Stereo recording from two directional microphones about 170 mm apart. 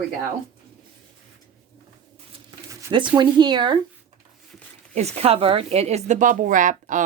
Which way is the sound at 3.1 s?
25° right (ahead or behind).